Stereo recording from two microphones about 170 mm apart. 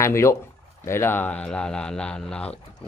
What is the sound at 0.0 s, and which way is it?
Speech, 15° left (ahead or behind).